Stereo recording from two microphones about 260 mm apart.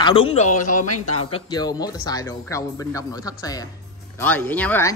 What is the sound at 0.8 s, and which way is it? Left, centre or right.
Speech, left.